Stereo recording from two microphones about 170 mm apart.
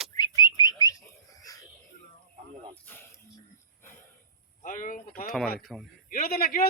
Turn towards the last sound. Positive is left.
turn(degrees=60)  # may be behind; listen again after turning